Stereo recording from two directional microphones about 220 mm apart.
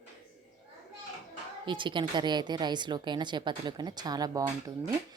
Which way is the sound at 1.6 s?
20° right (ahead or behind).